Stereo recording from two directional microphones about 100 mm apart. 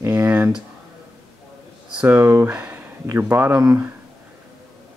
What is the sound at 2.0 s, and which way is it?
Speech, 20° right (ahead or behind).